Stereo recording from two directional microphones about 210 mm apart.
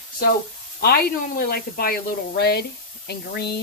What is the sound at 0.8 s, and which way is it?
Speech, 45° left (ahead or behind).